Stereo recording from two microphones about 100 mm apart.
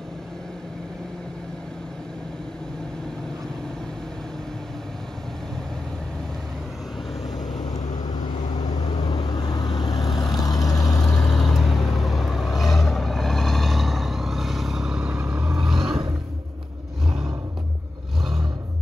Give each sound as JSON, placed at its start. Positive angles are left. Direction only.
{"t": 8.0, "sound": "vehicle", "side_deg": 40}
{"t": 9.9, "sound": "vehicle", "side_deg": 0}
{"t": 10.4, "sound": "vehicle", "side_deg": 40}
{"t": 11.0, "sound": "vehicle", "side_deg": 5}